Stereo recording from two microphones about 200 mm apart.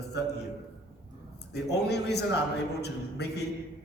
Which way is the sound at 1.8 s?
55° left (ahead or behind).